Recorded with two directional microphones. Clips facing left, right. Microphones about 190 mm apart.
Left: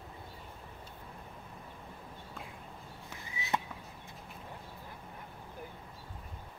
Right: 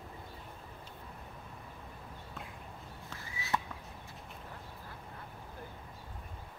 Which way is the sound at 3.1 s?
20° left (ahead or behind).